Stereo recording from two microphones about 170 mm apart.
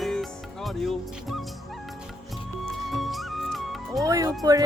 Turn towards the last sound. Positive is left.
turn(degrees=-20)  # may be behind; listen again after turning